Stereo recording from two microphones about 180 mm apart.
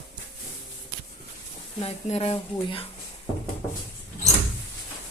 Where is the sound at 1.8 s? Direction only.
35° left (ahead or behind).